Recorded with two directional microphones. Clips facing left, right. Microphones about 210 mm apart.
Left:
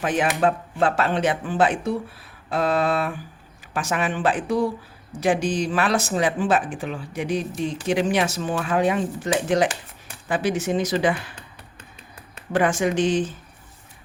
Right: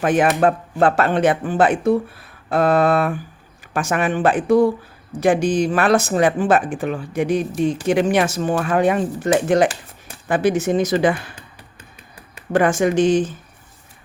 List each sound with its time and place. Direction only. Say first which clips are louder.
0.0 s speech: right 5 dB; 50° right (ahead or behind)
12.5 s speech: right 5 dB; 45° right (ahead or behind)